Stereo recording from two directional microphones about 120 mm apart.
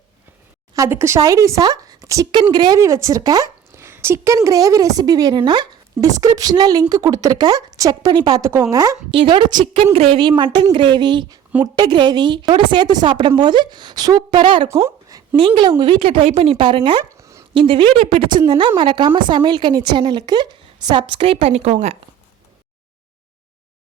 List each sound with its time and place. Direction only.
0.7 s a woman's voice: 25° right (ahead or behind)
9.1 s a woman's voice: 40° right (ahead or behind)
9.8 s a woman's voice: 55° right (ahead or behind)
14.8 s a sound: 20° right (ahead or behind)
15.4 s speech: 45° right (ahead or behind)
17.2 s dog: 25° right (ahead or behind)
17.5 s a woman's voice: 45° right (ahead or behind)
18.3 s a woman's voice: 40° right (ahead or behind); by 21.9 s 65° right (ahead or behind)